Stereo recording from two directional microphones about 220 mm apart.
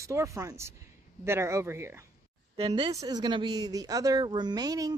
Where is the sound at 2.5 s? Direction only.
25° right (ahead or behind).